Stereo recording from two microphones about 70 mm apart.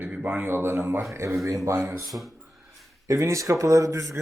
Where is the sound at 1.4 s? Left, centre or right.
Right.